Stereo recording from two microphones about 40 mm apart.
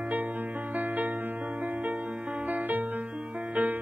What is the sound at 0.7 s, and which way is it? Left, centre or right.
Music, right.